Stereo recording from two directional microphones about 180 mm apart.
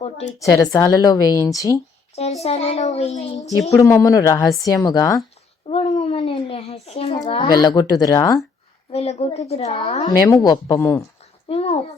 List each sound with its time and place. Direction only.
0.0 s a sound: 35° left (ahead or behind)
0.3 s a woman's voice: 20° left (ahead or behind)
2.4 s a woman's voice: 35° left (ahead or behind)
3.7 s a woman's voice: 15° left (ahead or behind)
5.6 s a sound: 30° left (ahead or behind)
6.8 s child singing: 35° left (ahead or behind)
7.1 s a child's voice: 20° left (ahead or behind)
8.9 s a woman's voice: 35° left (ahead or behind)
10.2 s a woman's voice: 20° left (ahead or behind)
11.4 s a sound: 35° left (ahead or behind)